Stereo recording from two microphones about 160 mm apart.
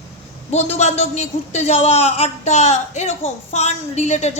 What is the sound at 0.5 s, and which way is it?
A man's voice, 45° left (ahead or behind).